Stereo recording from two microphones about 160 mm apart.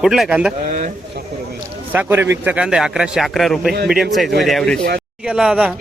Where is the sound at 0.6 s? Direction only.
50° right (ahead or behind).